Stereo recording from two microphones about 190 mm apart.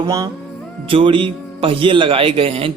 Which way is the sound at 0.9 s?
30° right (ahead or behind).